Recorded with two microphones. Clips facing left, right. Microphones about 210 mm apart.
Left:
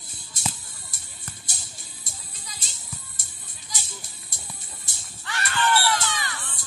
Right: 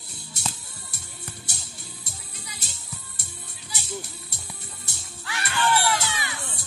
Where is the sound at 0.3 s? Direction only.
65° right (ahead or behind).